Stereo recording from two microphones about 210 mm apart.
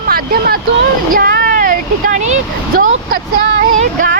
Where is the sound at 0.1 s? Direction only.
45° right (ahead or behind).